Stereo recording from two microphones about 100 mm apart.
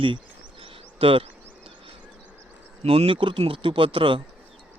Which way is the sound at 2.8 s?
85° right.